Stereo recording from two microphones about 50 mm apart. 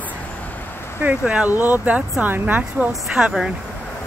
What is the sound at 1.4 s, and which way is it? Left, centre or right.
Speech, right.